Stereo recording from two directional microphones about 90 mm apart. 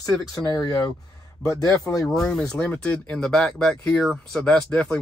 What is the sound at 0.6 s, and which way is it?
Speech, 45° left (ahead or behind).